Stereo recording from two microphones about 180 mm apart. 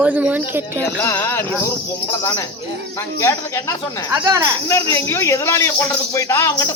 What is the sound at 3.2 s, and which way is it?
Speech, 15° left (ahead or behind).